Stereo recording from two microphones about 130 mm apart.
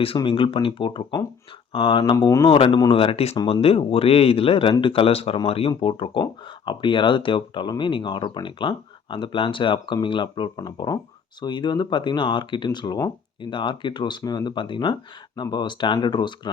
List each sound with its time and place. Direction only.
0.2 s speech: 40° left (ahead or behind)
2.5 s speech: 40° left (ahead or behind)